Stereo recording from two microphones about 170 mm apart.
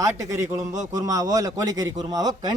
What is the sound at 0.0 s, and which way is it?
A man's voice, 20° right (ahead or behind).